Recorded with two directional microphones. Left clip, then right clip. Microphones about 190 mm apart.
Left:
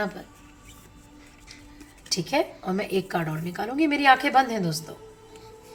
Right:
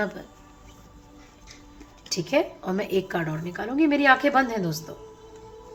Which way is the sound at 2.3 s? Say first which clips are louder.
Right 2 dB; 20° right (ahead or behind).